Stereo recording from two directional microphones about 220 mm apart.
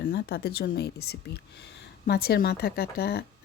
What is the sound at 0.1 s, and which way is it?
Speech, 50° left (ahead or behind).